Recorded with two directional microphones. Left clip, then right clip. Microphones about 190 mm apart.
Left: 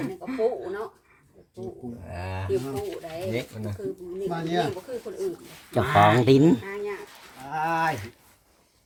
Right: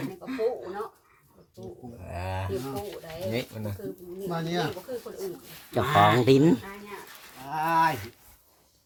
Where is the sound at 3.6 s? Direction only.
45° right (ahead or behind).